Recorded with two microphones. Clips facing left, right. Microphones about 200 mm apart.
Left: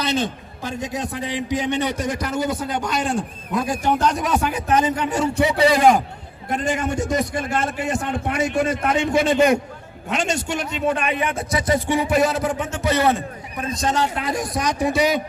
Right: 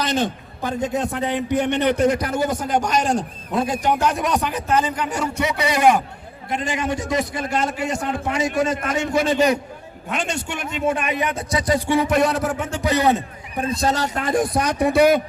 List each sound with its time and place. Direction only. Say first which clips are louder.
0.6 s a man's voice: right 4 dB; 60° right (ahead or behind); by 3.2 s 40° right (ahead or behind)
3.5 s a man's voice: right 1 dB; 25° right (ahead or behind)
4.0 s a man's voice: even; centre (ahead or behind); by 6.0 s 35° left (ahead or behind)
6.5 s a man's voice: left 1 dB; 50° left (ahead or behind)
10.8 s a man's voice: right 1 dB; 10° right (ahead or behind)
11.3 s speech: even; 25° left (ahead or behind); by 12.5 s centre (ahead or behind)
12.7 s a man's voice: right 1 dB; 15° right (ahead or behind)
13.6 s a man's voice: right 1 dB; 30° right (ahead or behind); by 15.2 s 55° right (ahead or behind)